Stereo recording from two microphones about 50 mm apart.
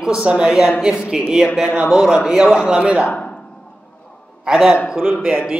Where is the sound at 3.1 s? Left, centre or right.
Left.